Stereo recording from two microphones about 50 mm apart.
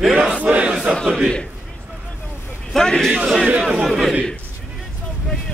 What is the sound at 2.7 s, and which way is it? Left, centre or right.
Speech, centre.